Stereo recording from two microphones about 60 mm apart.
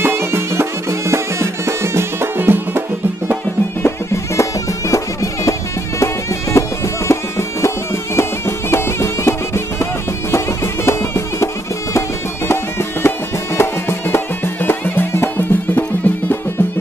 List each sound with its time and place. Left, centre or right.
0.0 s music: right
3.8 s music: left